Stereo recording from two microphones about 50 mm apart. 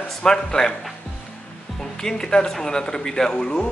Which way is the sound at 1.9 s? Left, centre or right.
Centre.